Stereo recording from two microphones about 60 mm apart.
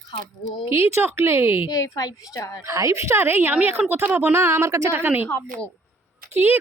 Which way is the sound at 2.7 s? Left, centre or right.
Right.